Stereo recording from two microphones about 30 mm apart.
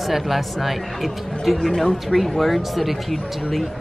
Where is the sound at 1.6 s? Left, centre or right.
Centre.